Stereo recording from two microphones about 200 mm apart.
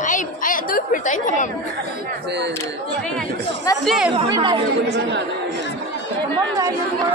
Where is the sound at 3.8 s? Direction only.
Centre (ahead or behind).